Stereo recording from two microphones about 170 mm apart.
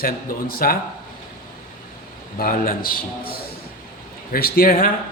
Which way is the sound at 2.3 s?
55° left (ahead or behind).